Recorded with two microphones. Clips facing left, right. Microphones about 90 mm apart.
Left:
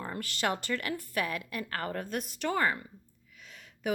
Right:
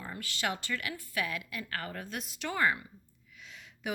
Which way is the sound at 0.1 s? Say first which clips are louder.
Left 3 dB; 45° left (ahead or behind).